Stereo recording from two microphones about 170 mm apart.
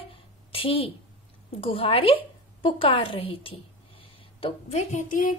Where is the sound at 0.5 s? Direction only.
35° left (ahead or behind).